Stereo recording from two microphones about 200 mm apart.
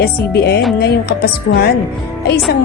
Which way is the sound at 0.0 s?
50° left (ahead or behind).